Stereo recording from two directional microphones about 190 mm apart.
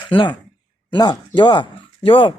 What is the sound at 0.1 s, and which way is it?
Speech, 25° left (ahead or behind).